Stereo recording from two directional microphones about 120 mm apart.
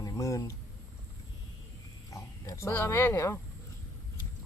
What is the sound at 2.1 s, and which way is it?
Speech, 25° left (ahead or behind).